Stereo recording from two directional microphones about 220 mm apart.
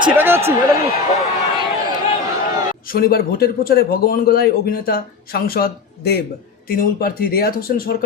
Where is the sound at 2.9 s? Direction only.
45° left (ahead or behind).